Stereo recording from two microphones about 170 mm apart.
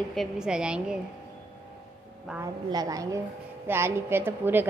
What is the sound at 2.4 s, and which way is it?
A woman's voice, 20° right (ahead or behind).